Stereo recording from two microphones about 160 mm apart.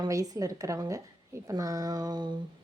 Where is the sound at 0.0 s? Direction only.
20° right (ahead or behind).